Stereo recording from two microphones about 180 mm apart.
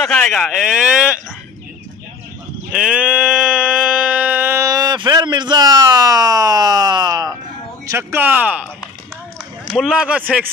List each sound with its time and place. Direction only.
0.0 s speech: 5° left (ahead or behind)
2.7 s sheep: 5° right (ahead or behind)
7.9 s speech: 10° right (ahead or behind)
9.7 s speech: centre (ahead or behind)